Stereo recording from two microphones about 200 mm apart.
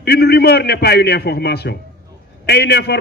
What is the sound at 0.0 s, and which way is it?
A man's voice, 55° left (ahead or behind).